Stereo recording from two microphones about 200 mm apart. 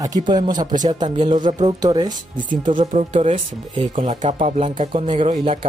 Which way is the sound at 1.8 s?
20° right (ahead or behind).